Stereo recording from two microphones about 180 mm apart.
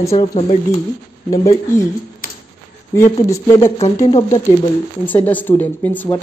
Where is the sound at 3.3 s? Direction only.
15° left (ahead or behind).